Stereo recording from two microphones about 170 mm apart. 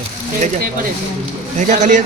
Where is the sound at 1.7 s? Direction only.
45° right (ahead or behind).